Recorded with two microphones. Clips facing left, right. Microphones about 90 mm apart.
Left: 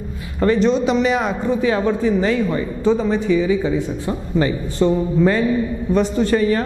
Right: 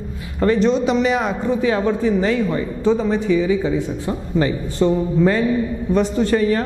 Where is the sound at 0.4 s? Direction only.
15° left (ahead or behind).